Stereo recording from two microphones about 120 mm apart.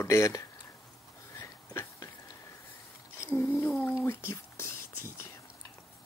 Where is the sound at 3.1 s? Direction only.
20° left (ahead or behind).